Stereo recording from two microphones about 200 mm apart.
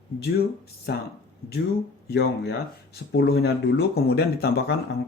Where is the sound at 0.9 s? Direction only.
55° left (ahead or behind).